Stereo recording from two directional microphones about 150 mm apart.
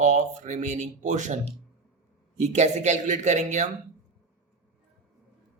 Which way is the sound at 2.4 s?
50° right (ahead or behind).